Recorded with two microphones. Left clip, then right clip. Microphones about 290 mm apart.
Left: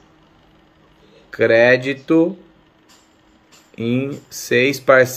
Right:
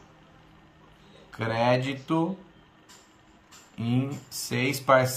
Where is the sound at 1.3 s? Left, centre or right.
Right.